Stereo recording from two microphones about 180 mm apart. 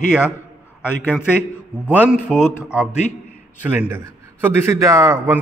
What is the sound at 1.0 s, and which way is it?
Speech, 10° left (ahead or behind).